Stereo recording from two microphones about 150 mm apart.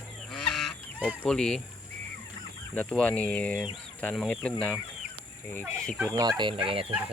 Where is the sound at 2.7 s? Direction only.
5° left (ahead or behind).